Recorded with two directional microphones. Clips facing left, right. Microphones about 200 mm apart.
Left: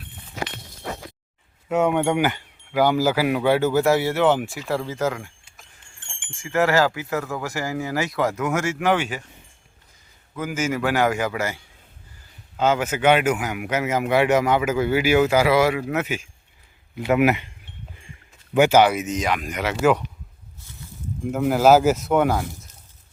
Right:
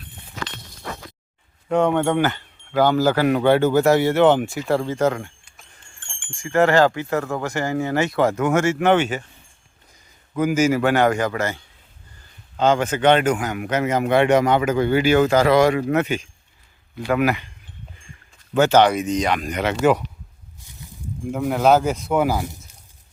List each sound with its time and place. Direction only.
1.7 s speech: 10° left (ahead or behind)
6.0 s wind chime: 20° left (ahead or behind)
6.3 s speech: 5° left (ahead or behind)
8.1 s speech: 30° right (ahead or behind)
8.9 s speech: centre (ahead or behind)
10.4 s speech: 10° right (ahead or behind)
10.8 s speech: 5° left (ahead or behind)
17.0 s speech: 20° left (ahead or behind)
18.5 s speech: 10° left (ahead or behind)
20.6 s a sound: 15° right (ahead or behind)
21.2 s speech: 5° left (ahead or behind)